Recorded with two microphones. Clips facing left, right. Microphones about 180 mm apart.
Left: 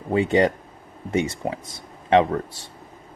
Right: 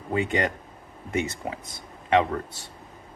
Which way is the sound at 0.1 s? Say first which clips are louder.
Left 6 dB; 30° left (ahead or behind).